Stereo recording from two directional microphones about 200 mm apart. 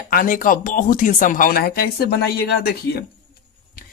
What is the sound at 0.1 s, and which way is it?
Speech, 45° left (ahead or behind).